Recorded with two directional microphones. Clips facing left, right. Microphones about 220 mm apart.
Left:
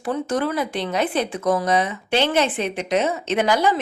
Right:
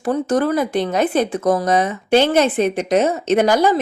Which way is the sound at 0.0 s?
45° right (ahead or behind).